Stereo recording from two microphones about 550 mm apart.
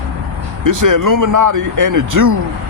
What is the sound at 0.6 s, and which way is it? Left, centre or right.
Speech, right.